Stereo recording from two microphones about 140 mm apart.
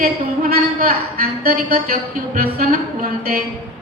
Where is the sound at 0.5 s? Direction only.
90° right.